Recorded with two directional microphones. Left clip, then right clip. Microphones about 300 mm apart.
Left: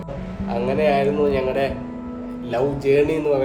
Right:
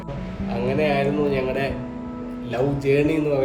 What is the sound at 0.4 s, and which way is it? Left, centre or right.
A man's voice, centre.